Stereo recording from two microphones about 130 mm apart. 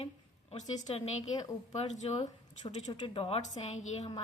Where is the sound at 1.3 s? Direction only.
30° left (ahead or behind).